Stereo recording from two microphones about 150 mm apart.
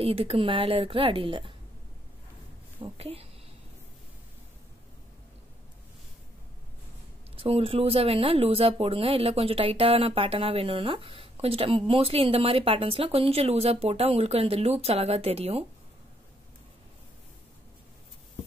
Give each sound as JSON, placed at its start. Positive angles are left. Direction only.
{"t": 0.0, "sound": "speech", "side_deg": -40}
{"t": 2.8, "sound": "speech", "side_deg": -40}
{"t": 7.3, "sound": "speech", "side_deg": -40}